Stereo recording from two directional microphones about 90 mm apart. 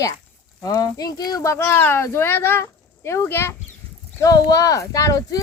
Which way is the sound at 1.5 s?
30° left (ahead or behind).